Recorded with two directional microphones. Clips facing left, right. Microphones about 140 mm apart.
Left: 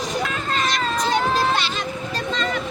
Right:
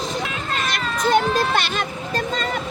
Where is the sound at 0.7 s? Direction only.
55° right (ahead or behind).